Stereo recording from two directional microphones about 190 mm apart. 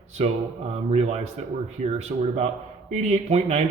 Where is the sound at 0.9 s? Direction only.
35° right (ahead or behind).